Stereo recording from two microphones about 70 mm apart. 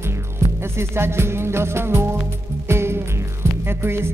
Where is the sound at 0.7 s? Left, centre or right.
Right.